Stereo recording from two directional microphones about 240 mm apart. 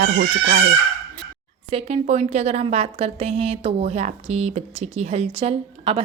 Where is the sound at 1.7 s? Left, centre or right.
Right.